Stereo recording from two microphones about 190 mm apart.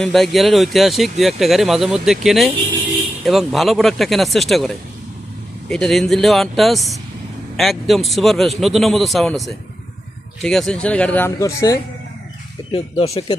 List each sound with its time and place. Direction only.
0.0 s a man's voice: centre (ahead or behind); by 11.8 s 15° left (ahead or behind)
12.7 s speech: 30° left (ahead or behind)